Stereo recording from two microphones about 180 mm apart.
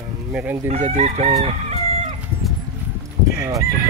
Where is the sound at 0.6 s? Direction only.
40° right (ahead or behind).